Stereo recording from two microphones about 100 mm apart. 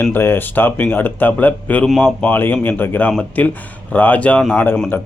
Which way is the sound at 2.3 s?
20° left (ahead or behind).